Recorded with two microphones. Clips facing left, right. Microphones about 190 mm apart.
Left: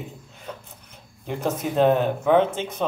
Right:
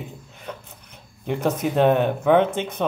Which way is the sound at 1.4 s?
65° right (ahead or behind).